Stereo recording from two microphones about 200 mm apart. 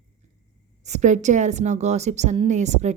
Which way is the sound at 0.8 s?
35° right (ahead or behind).